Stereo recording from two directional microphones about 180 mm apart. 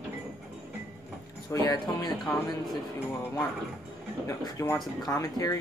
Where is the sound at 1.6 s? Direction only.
20° left (ahead or behind).